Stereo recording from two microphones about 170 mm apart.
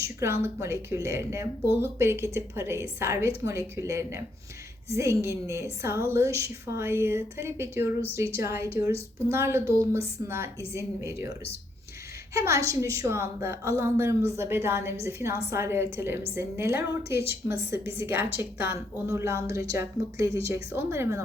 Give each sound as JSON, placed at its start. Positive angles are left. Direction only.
{"t": 0.0, "sound": "a woman's voice", "side_deg": -15}
{"t": 12.3, "sound": "a woman's voice", "side_deg": -15}